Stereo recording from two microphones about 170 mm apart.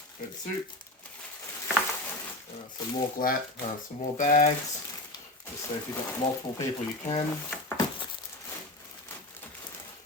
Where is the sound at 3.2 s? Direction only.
55° left (ahead or behind).